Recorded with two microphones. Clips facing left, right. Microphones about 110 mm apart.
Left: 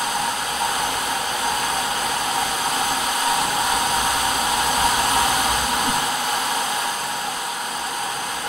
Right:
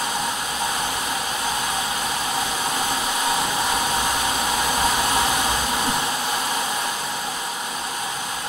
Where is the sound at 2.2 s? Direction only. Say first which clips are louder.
Left 2 dB; 5° left (ahead or behind).